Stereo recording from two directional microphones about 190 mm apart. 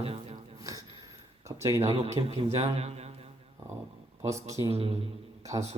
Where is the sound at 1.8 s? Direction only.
30° right (ahead or behind).